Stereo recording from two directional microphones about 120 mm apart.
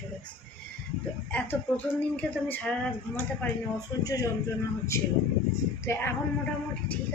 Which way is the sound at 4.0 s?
30° left (ahead or behind).